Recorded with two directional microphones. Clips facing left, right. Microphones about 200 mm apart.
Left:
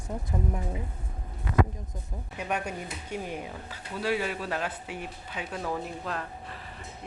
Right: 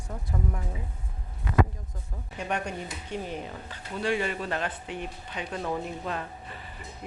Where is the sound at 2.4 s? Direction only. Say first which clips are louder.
Right 1 dB; 5° left (ahead or behind).